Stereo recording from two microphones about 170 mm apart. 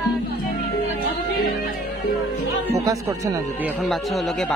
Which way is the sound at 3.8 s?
Centre (ahead or behind).